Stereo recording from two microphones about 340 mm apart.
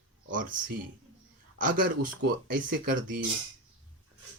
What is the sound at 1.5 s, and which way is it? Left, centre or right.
A man's voice, right.